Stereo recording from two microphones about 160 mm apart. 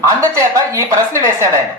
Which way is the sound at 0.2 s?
20° right (ahead or behind).